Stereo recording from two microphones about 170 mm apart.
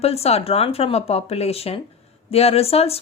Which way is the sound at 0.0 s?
35° left (ahead or behind).